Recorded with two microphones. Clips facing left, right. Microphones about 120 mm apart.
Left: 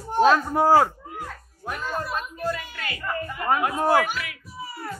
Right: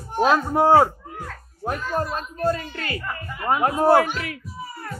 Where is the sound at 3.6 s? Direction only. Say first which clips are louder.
Right 6 dB; 35° right (ahead or behind).